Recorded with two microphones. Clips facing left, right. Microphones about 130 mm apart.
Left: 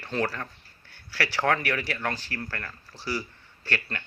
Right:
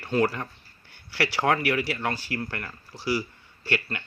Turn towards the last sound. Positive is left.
turn(degrees=-10)  # may be behind; listen again after turning